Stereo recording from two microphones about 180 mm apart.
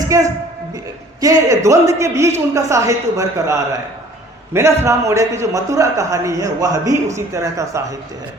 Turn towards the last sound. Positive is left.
turn(degrees=-15)  # may be behind; listen again after turning